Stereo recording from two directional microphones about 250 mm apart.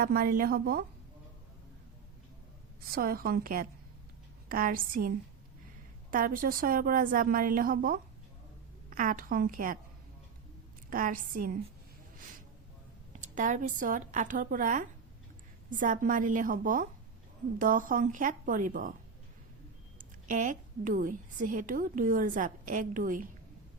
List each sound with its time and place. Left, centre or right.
0.0 s a woman's voice: right
2.9 s a woman's voice: right
10.8 s a woman's voice: right
13.1 s a woman's voice: right
20.2 s a woman's voice: right